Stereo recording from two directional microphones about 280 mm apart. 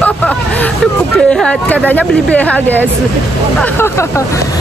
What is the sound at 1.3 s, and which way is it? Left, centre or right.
Speech, centre.